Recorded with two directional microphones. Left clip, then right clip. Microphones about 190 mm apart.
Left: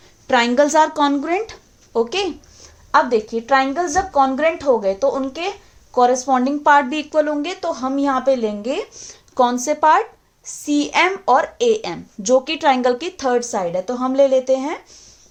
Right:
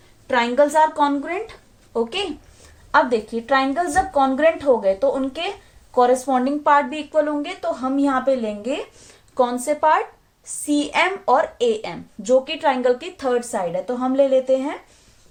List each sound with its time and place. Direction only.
0.3 s a woman's voice: 55° left (ahead or behind)
2.9 s a woman's voice: 25° left (ahead or behind)